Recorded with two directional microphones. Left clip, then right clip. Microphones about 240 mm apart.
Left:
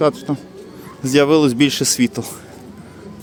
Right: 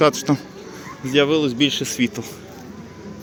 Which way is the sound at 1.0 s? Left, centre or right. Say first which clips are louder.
Left 4 dB; left.